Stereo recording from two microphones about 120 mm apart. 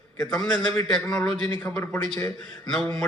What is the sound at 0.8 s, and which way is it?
A man's voice, 5° left (ahead or behind).